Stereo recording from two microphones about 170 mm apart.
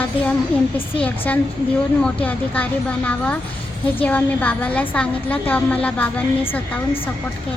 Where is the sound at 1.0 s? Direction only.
10° left (ahead or behind).